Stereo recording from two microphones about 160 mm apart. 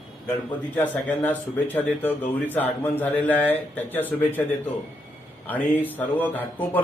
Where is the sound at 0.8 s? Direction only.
10° left (ahead or behind).